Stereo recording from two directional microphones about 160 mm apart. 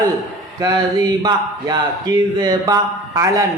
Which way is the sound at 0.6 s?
25° right (ahead or behind).